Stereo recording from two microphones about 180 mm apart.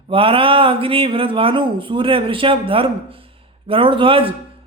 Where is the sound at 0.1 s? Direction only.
30° right (ahead or behind).